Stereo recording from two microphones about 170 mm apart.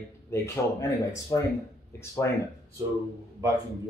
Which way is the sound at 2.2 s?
15° left (ahead or behind).